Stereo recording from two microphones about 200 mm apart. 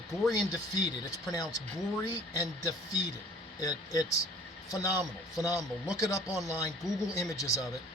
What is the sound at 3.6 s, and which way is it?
Speech, 20° left (ahead or behind).